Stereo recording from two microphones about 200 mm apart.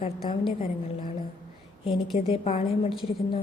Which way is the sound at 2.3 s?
25° left (ahead or behind).